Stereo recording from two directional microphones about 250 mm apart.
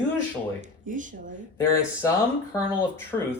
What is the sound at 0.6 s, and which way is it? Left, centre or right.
Speech, right.